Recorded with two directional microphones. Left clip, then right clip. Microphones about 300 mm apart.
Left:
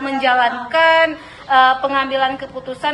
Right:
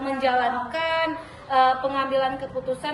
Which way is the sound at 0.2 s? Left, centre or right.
Centre.